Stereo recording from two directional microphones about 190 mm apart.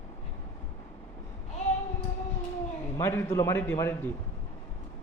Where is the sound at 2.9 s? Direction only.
15° left (ahead or behind).